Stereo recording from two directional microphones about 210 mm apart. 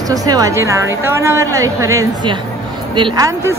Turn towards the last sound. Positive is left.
turn(degrees=-15)  # may be behind; listen again after turning